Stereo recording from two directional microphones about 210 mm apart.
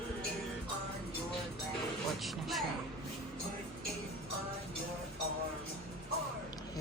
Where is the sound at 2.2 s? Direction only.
Centre (ahead or behind).